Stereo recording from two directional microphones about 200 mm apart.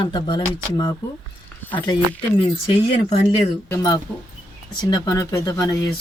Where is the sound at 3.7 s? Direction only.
15° left (ahead or behind).